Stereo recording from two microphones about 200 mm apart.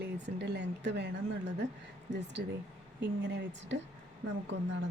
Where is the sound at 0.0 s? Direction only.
60° right (ahead or behind).